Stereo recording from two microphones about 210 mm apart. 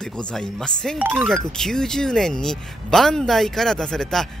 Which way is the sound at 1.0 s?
10° right (ahead or behind).